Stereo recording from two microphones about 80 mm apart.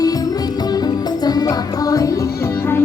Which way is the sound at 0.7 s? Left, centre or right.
Left.